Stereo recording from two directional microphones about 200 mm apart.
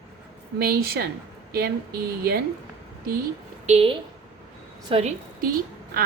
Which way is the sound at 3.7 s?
30° right (ahead or behind).